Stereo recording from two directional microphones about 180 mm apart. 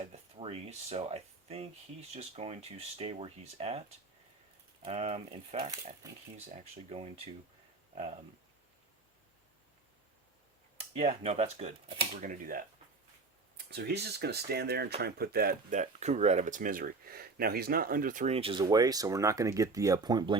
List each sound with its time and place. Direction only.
0.0 s speech: 35° right (ahead or behind)
10.9 s speech: 35° right (ahead or behind)
12.2 s speech: 50° right (ahead or behind)
13.7 s speech: 65° right (ahead or behind); by 18.3 s 45° right (ahead or behind)
18.3 s speech: 30° right (ahead or behind)